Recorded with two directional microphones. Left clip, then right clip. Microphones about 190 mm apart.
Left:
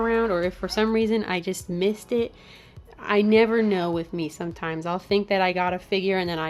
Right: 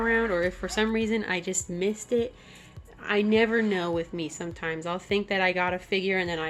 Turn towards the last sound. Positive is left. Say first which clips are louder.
# left 2 dB
turn(degrees=30)  # may be behind; listen again after turning